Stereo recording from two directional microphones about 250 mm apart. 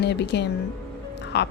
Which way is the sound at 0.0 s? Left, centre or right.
Left.